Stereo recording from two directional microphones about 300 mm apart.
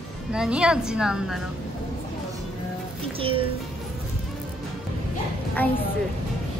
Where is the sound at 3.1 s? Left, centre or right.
Centre.